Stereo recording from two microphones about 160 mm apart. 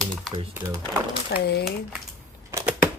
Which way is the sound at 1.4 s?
90° left.